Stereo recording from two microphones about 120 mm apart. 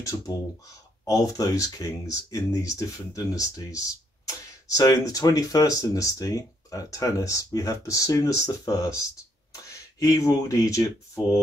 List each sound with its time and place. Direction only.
0.1 s speech: 20° left (ahead or behind)